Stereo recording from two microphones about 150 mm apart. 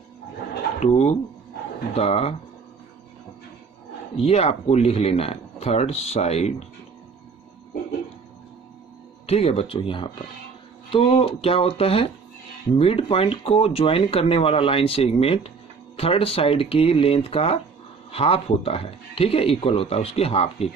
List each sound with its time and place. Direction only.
0.7 s speech: 45° left (ahead or behind)
4.2 s speech: 40° left (ahead or behind)
9.2 s speech: 40° left (ahead or behind)